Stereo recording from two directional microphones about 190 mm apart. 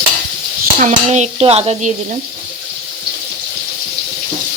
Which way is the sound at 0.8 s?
40° right (ahead or behind).